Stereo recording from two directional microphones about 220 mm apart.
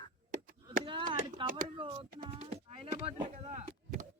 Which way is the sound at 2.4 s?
25° right (ahead or behind).